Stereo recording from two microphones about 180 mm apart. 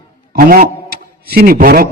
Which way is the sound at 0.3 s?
55° right (ahead or behind).